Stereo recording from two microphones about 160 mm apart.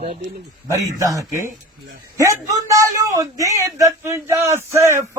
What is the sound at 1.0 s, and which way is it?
A man's voice, 20° right (ahead or behind).